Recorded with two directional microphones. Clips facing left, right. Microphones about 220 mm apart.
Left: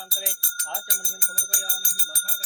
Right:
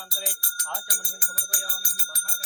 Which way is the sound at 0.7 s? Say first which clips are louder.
Left 1 dB; 25° left (ahead or behind).